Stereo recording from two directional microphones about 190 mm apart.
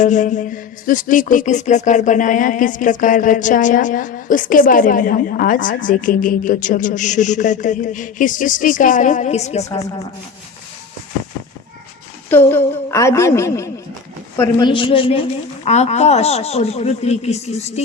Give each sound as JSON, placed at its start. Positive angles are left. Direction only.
{"t": 0.0, "sound": "speech", "side_deg": 40}
{"t": 12.3, "sound": "a woman's voice", "side_deg": 10}
{"t": 14.7, "sound": "a man's voice", "side_deg": 25}